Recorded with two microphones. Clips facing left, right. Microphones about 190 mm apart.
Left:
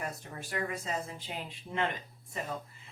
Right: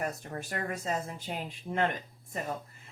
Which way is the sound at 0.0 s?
50° right (ahead or behind).